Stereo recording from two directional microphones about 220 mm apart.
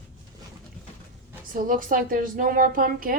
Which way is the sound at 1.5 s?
40° right (ahead or behind).